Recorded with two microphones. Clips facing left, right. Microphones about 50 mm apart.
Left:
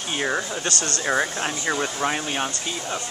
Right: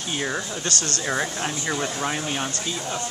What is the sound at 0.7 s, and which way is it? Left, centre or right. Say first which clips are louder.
Speech: left 1 dB; left.